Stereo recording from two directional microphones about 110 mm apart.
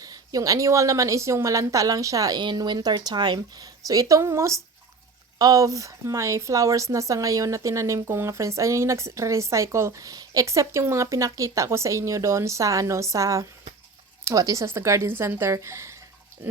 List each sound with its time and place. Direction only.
0.0 s a woman's voice: 35° right (ahead or behind)